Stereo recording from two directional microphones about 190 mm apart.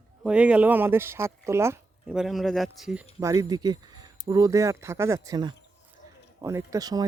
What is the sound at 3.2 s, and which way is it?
Speech, 15° right (ahead or behind).